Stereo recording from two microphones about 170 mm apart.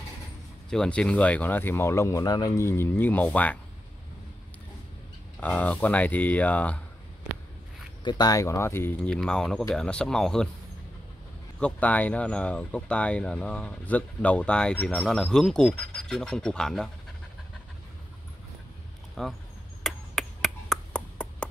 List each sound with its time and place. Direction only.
0.7 s speech: 5° left (ahead or behind)
5.4 s speech: 10° left (ahead or behind)
8.0 s speech: 25° left (ahead or behind)
9.1 s speech: 5° left (ahead or behind)
11.6 s speech: 10° left (ahead or behind)
19.2 s speech: centre (ahead or behind)
19.8 s chop: centre (ahead or behind)